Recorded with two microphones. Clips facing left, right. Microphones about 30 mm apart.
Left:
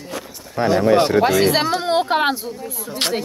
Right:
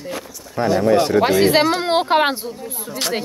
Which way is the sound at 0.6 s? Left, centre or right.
Left.